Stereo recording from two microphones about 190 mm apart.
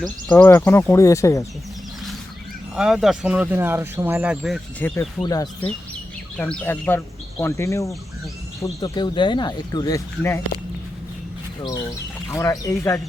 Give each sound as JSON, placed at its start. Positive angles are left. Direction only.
{"t": 0.0, "sound": "speech", "side_deg": 5}
{"t": 2.7, "sound": "speech", "side_deg": 0}
{"t": 4.8, "sound": "speech", "side_deg": 10}
{"t": 5.2, "sound": "speech", "side_deg": 20}
{"t": 6.3, "sound": "speech", "side_deg": 5}
{"t": 12.3, "sound": "speech", "side_deg": 20}